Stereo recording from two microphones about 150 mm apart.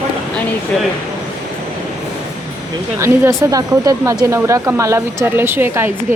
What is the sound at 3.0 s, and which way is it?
A woman's voice, 20° right (ahead or behind).